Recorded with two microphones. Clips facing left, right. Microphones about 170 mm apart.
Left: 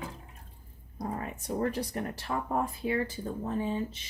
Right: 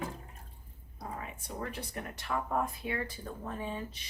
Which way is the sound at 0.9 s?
45° left (ahead or behind).